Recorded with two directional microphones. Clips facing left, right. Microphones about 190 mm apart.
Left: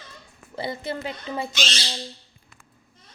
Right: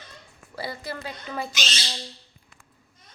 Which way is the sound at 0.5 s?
25° left (ahead or behind).